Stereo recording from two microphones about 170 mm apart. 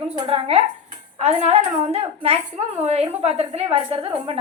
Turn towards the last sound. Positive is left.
turn(degrees=-30)  # may be behind; listen again after turning